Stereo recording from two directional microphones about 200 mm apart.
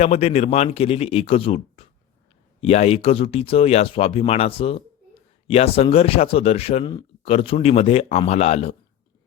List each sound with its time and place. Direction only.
0.0 s speech: 30° left (ahead or behind)